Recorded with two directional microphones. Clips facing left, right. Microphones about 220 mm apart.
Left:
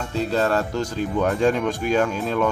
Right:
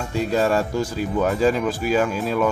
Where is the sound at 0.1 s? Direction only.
10° right (ahead or behind).